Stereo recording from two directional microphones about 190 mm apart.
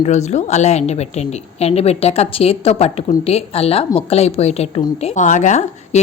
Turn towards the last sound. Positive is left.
turn(degrees=40)  # may be behind; listen again after turning